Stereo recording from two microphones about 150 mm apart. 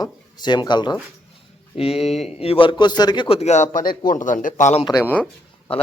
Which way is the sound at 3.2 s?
45° left (ahead or behind).